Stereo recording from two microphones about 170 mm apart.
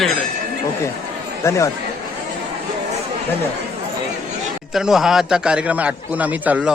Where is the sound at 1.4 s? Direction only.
15° left (ahead or behind).